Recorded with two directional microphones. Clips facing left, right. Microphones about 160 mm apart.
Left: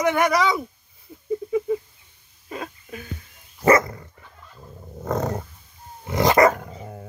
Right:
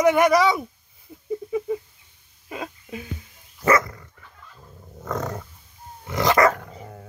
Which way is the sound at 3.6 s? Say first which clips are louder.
Left 3 dB; 25° left (ahead or behind).